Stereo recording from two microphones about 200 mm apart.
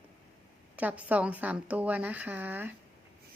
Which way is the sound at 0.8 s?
5° right (ahead or behind).